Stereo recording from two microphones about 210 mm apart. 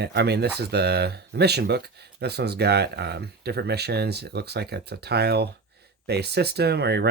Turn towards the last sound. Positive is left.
turn(degrees=-50)  # may be behind; listen again after turning